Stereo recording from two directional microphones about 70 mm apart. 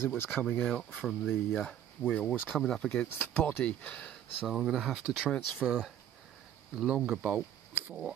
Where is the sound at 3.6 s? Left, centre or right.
Centre.